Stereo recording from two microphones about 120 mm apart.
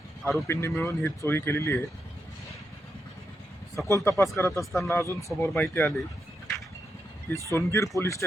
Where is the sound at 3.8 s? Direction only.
25° left (ahead or behind).